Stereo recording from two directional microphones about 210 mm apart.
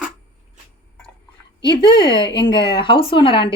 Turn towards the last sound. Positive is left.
turn(degrees=25)  # may be behind; listen again after turning